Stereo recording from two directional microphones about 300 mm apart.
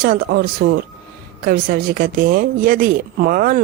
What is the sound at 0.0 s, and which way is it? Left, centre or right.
Speech, right.